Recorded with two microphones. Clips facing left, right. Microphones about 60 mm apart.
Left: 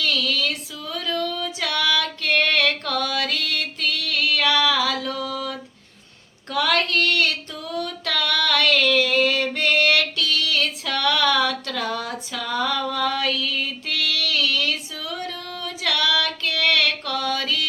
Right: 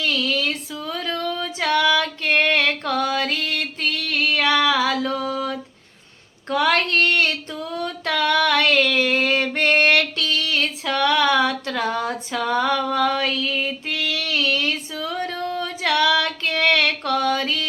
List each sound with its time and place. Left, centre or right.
0.0 s female singing: right